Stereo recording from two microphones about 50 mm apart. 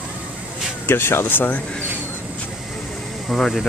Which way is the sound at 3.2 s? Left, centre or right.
Centre.